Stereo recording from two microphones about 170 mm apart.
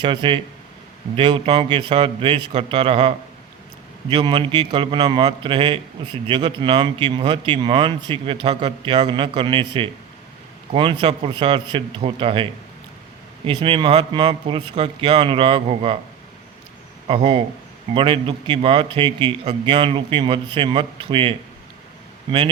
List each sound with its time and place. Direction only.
0.0 s a man's voice: 30° right (ahead or behind)
17.1 s a man's voice: 30° right (ahead or behind)